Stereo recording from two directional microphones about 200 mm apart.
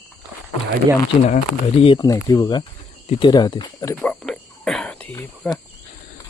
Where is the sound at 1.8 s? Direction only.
25° left (ahead or behind).